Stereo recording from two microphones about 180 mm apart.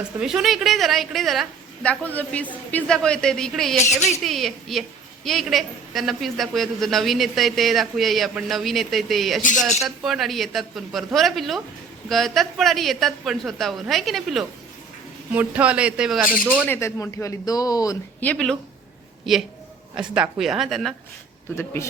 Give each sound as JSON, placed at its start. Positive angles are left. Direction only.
{"t": 0.2, "sound": "a woman's voice", "side_deg": -5}
{"t": 16.6, "sound": "speech", "side_deg": 15}
{"t": 18.2, "sound": "a woman's voice", "side_deg": 5}
{"t": 20.0, "sound": "a woman's voice", "side_deg": -5}
{"t": 21.5, "sound": "speech", "side_deg": 15}